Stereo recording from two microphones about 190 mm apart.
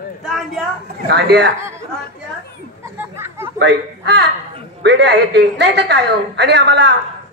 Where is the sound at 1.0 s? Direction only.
60° right (ahead or behind).